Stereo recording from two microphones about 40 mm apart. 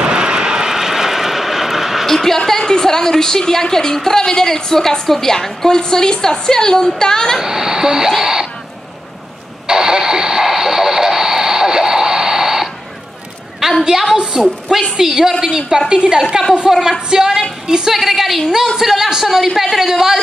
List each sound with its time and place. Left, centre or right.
0.0 s vehicle: right
2.0 s a woman's voice: centre
7.3 s a woman's voice: centre
8.2 s a sound: centre
9.7 s radio: centre
13.6 s a sound: centre
14.3 s a woman's voice: centre
17.9 s a woman's voice: centre